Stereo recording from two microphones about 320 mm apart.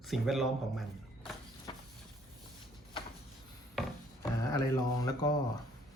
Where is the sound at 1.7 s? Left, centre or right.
Centre.